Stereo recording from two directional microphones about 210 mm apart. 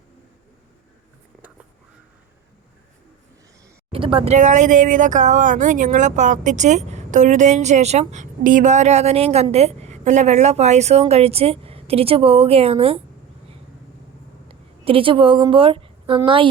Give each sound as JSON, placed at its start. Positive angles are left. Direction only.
{"t": 3.9, "sound": "speech", "side_deg": -25}
{"t": 14.4, "sound": "a woman's voice", "side_deg": -25}